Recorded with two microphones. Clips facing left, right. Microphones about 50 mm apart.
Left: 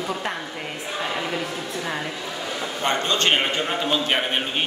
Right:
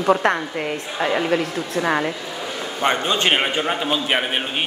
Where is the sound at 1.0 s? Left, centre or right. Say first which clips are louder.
Right 8 dB; right.